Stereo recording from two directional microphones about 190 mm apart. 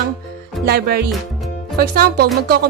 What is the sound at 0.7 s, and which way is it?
Speech, 55° right (ahead or behind).